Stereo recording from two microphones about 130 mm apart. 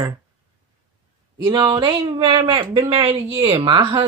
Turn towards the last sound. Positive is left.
turn(degrees=-40)  # may be behind; listen again after turning